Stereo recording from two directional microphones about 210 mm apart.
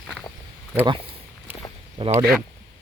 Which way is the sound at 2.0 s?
25° right (ahead or behind).